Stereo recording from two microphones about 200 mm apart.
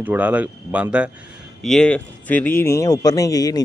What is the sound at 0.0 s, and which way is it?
Speech, 10° right (ahead or behind).